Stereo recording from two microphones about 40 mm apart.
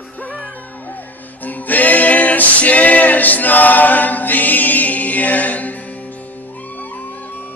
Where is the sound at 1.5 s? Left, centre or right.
Left.